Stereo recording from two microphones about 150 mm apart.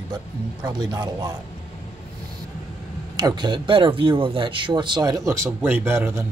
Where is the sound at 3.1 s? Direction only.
30° right (ahead or behind).